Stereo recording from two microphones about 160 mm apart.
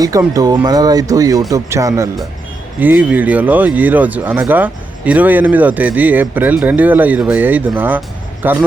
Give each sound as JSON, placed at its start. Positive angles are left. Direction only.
{"t": 0.0, "sound": "speech", "side_deg": -20}